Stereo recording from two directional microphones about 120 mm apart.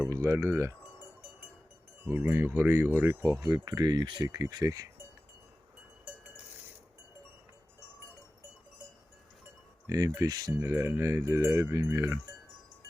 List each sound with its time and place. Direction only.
0.0 s speech: 25° right (ahead or behind)
2.0 s speech: 20° right (ahead or behind)
3.4 s speech: 35° right (ahead or behind)
9.8 s speech: 30° right (ahead or behind)